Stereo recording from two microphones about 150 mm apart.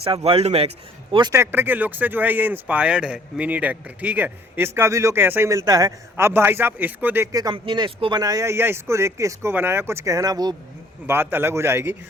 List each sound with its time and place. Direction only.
0.0 s speech: 40° right (ahead or behind)
1.3 s speech: 15° right (ahead or behind)
7.3 s speech: 30° right (ahead or behind)
11.0 s speech: 15° right (ahead or behind)